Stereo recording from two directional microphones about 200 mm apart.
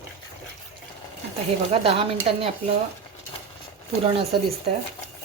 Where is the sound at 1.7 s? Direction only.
30° right (ahead or behind).